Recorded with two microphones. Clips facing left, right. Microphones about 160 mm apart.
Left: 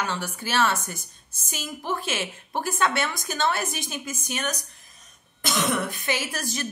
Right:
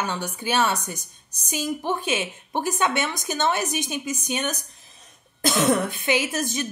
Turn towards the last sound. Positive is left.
turn(degrees=-20)  # may be behind; listen again after turning